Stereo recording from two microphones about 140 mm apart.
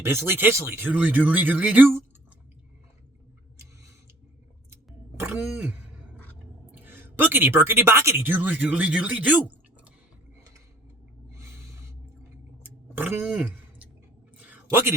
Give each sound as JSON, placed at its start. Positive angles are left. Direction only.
{"t": 0.0, "sound": "speech", "side_deg": -15}
{"t": 5.1, "sound": "throat clearing", "side_deg": -15}
{"t": 6.7, "sound": "a woman's voice", "side_deg": -15}
{"t": 11.3, "sound": "gasp", "side_deg": -20}
{"t": 12.9, "sound": "speech", "side_deg": -15}
{"t": 14.3, "sound": "a sound", "side_deg": -10}